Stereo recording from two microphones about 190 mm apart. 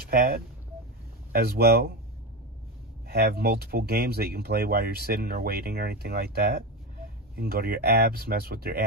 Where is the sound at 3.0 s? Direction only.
55° right (ahead or behind).